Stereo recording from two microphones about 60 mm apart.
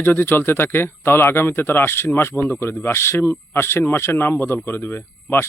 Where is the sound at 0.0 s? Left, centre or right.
Left.